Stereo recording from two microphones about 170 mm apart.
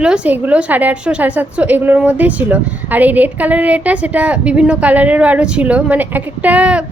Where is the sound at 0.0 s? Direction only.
5° right (ahead or behind).